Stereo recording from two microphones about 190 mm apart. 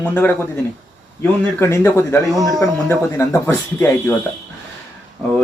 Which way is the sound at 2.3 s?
20° right (ahead or behind).